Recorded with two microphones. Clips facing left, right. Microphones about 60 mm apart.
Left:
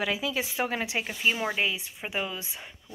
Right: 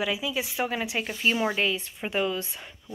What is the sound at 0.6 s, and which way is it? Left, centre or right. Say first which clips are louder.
Speech: right 1 dB; left.